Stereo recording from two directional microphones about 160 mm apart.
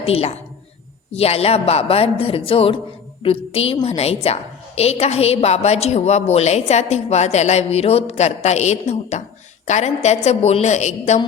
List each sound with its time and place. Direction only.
0.0 s a woman's voice: 40° left (ahead or behind)